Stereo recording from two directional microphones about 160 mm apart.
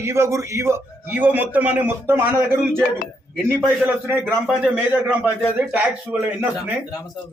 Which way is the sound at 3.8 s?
15° right (ahead or behind).